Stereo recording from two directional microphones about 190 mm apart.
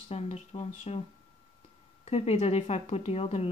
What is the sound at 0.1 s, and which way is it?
Speech, 35° left (ahead or behind).